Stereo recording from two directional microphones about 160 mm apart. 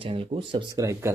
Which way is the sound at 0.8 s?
20° right (ahead or behind).